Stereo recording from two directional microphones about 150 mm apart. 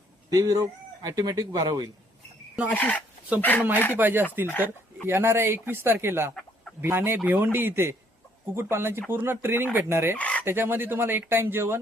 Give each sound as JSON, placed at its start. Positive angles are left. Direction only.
{"t": 0.3, "sound": "speech", "side_deg": -25}
{"t": 2.7, "sound": "speech", "side_deg": 10}
{"t": 3.9, "sound": "speech", "side_deg": -15}
{"t": 10.2, "sound": "chicken", "side_deg": 10}
{"t": 10.4, "sound": "speech", "side_deg": -15}